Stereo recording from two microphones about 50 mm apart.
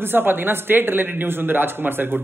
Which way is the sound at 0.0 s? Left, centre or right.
Right.